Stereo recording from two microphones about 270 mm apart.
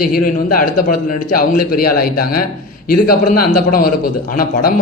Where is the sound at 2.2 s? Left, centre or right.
Left.